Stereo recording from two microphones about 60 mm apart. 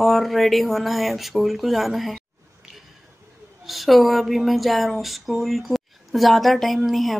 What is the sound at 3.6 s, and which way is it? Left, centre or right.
Speech, centre.